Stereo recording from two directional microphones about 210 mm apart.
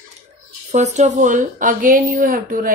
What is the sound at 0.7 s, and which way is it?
Speech, 35° right (ahead or behind).